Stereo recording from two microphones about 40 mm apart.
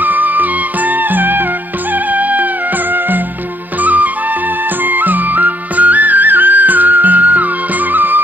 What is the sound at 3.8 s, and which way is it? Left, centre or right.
Music, right.